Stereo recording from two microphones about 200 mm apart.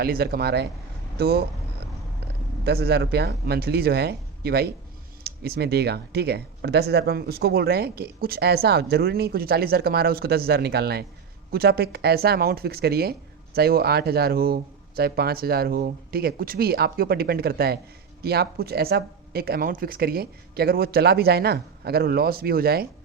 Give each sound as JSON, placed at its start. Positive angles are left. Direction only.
{"t": 0.0, "sound": "speech", "side_deg": -50}
{"t": 2.6, "sound": "speech", "side_deg": -50}